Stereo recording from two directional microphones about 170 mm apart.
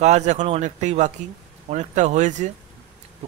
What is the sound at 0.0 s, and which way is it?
Speech, 45° right (ahead or behind).